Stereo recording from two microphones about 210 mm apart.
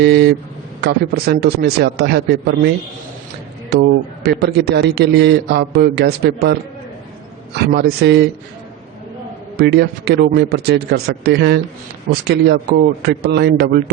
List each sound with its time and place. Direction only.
0.0 s a man's voice: 50° right (ahead or behind)
9.6 s a man's voice: 50° right (ahead or behind)